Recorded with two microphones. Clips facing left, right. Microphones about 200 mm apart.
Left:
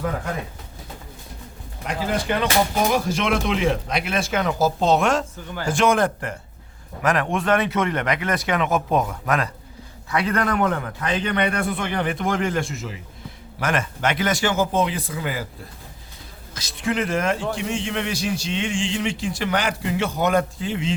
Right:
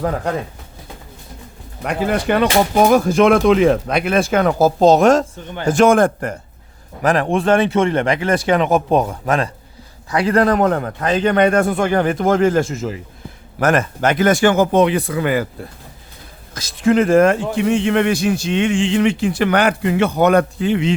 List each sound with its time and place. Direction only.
1.8 s speech: 60° right (ahead or behind); by 6.4 s 45° right (ahead or behind)
7.0 s a man's voice: 30° right (ahead or behind); by 15.4 s 65° right (ahead or behind)
16.6 s a man's voice: 45° right (ahead or behind); by 20.9 s 65° right (ahead or behind)